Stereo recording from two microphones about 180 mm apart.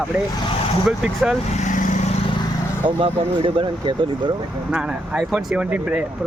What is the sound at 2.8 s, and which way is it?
Speech, 30° right (ahead or behind).